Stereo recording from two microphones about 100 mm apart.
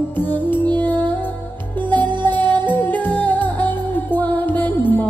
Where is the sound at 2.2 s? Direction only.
20° left (ahead or behind).